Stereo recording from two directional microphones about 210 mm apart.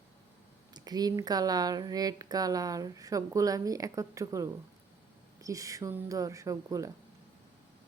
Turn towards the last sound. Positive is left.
turn(degrees=-15)  # may be behind; listen again after turning